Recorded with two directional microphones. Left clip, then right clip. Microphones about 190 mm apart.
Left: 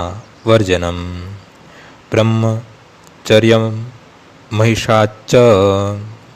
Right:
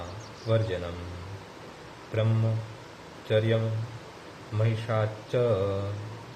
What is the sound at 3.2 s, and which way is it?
A man's voice, 65° left (ahead or behind).